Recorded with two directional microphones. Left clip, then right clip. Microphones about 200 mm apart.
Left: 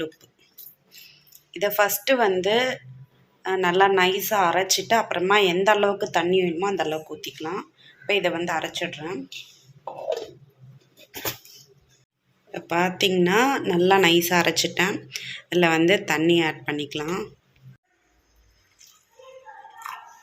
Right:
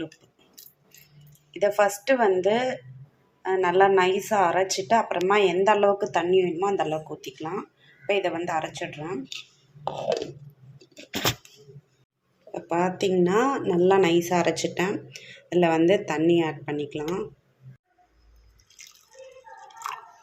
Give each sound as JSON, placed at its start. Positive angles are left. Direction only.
{"t": 1.5, "sound": "speech", "side_deg": -5}
{"t": 11.1, "sound": "a sound", "side_deg": -35}
{"t": 12.5, "sound": "speech", "side_deg": -5}